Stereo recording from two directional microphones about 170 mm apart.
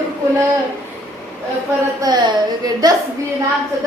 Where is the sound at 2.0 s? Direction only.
25° right (ahead or behind).